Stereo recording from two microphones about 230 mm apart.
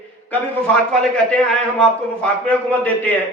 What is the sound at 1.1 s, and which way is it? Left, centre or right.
A man's voice, centre.